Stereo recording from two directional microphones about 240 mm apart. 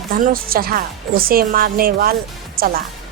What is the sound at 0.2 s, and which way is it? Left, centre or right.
A woman's voice, right.